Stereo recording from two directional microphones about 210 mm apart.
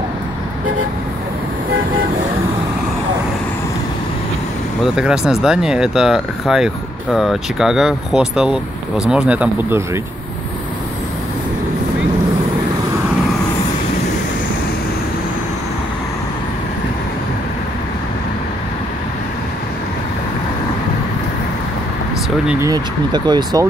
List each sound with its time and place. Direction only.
4.9 s speech: 5° right (ahead or behind)
22.5 s speech: 15° right (ahead or behind)